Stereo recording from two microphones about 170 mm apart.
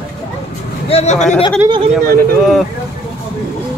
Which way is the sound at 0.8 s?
40° left (ahead or behind).